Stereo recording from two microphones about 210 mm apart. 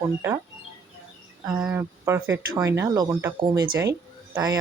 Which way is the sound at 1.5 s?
10° right (ahead or behind).